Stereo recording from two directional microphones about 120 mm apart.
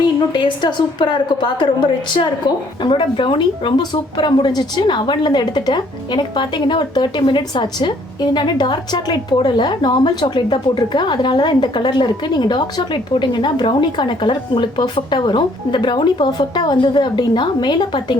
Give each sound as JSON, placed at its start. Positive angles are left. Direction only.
{"t": 0.2, "sound": "speech", "side_deg": 40}
{"t": 2.8, "sound": "speech", "side_deg": 40}